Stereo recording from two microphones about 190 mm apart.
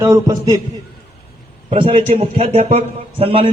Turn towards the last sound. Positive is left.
turn(degrees=-30)  # may be behind; listen again after turning